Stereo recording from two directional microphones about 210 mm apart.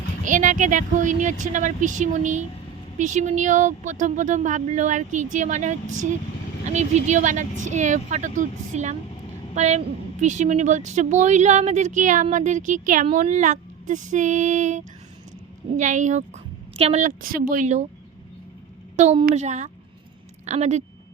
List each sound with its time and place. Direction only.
0.3 s a woman's voice: 35° right (ahead or behind)
18.9 s a woman's voice: 35° right (ahead or behind)